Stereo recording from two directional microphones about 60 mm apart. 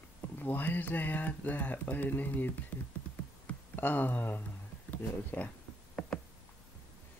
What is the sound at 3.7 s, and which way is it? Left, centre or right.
Speech, left.